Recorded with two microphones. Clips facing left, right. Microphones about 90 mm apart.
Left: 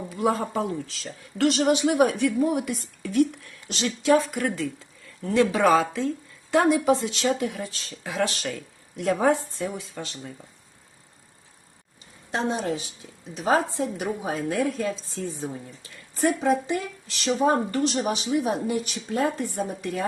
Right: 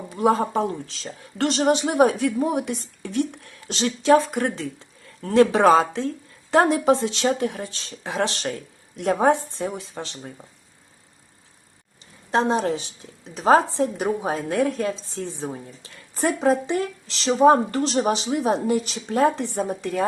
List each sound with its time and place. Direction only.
0.1 s speech: 35° right (ahead or behind)
12.3 s speech: 40° right (ahead or behind)
14.3 s a woman's voice: 50° right (ahead or behind)
15.3 s speech: 25° right (ahead or behind)
16.2 s speech: 35° right (ahead or behind)